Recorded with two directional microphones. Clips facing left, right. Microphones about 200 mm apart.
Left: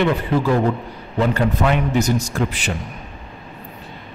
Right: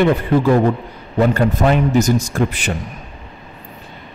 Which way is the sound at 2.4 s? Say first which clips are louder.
Right 3 dB; 50° right (ahead or behind).